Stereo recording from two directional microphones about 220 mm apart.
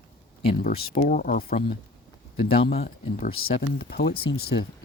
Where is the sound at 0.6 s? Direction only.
40° left (ahead or behind).